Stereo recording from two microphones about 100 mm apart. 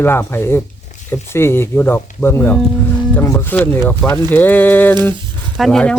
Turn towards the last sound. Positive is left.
turn(degrees=10)  # may be behind; listen again after turning